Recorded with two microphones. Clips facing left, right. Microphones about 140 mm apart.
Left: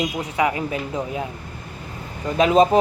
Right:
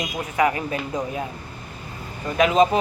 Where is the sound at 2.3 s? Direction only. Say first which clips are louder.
Left 2 dB; 35° left (ahead or behind).